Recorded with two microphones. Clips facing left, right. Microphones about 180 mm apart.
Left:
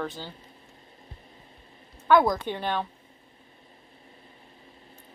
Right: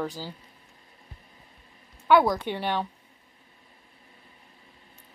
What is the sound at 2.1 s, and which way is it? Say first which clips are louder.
Speech: even; 10° right (ahead or behind).